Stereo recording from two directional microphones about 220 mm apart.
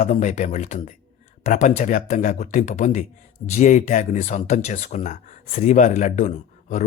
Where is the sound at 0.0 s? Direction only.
30° left (ahead or behind).